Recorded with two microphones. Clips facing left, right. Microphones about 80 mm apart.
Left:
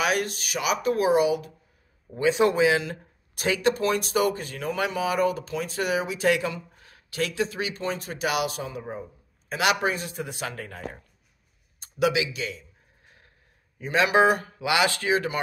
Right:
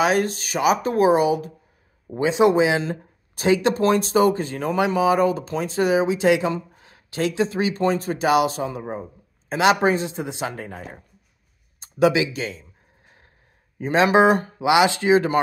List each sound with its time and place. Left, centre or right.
0.0 s speech: right
11.8 s speech: right
13.7 s speech: right